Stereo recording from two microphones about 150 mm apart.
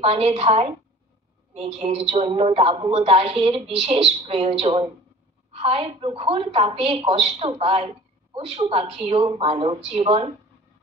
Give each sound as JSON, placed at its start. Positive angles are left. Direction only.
{"t": 0.0, "sound": "a woman's voice", "side_deg": -40}